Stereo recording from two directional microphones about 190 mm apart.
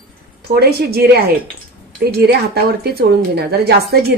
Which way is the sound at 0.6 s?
55° right (ahead or behind).